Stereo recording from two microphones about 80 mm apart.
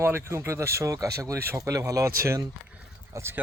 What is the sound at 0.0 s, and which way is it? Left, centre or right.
Speech, right.